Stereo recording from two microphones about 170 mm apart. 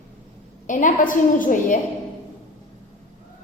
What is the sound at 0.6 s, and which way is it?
A woman's voice, 50° left (ahead or behind).